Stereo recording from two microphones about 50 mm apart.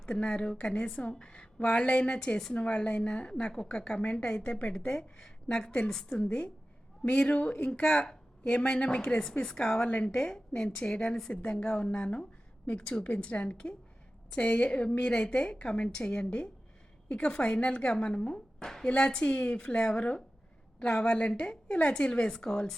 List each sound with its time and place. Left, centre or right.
0.0 s a woman's voice: centre